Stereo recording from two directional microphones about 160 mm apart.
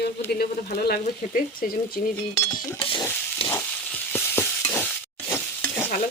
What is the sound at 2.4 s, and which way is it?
Speech, 20° left (ahead or behind).